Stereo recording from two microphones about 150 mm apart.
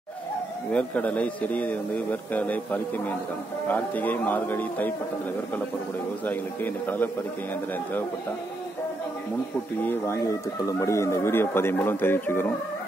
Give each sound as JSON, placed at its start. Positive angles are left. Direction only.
{"t": 0.7, "sound": "speech", "side_deg": 10}
{"t": 6.2, "sound": "speech", "side_deg": 10}
{"t": 9.8, "sound": "speech", "side_deg": 20}